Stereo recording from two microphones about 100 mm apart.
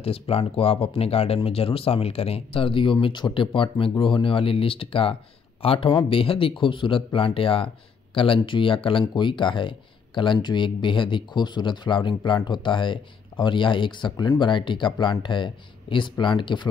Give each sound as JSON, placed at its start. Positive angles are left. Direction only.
{"t": 0.0, "sound": "speech", "side_deg": 75}